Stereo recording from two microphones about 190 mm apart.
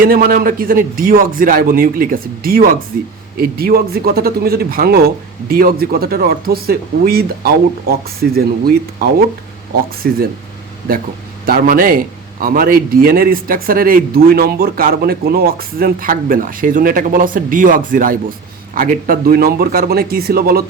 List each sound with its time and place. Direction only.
0.0 s a man's voice: 50° right (ahead or behind)
11.4 s a man's voice: 50° right (ahead or behind)